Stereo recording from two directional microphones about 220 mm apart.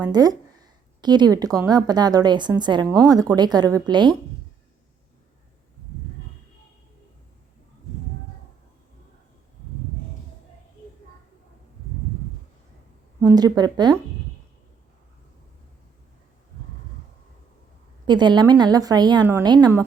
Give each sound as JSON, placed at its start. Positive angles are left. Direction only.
{"t": 0.0, "sound": "a woman's voice", "side_deg": -15}
{"t": 13.1, "sound": "speech", "side_deg": -15}
{"t": 18.0, "sound": "a woman's voice", "side_deg": -20}